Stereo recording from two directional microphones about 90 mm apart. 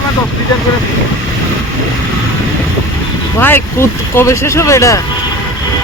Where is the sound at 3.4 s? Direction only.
25° left (ahead or behind).